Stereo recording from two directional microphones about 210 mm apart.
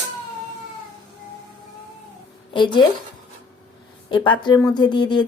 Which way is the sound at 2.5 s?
20° left (ahead or behind).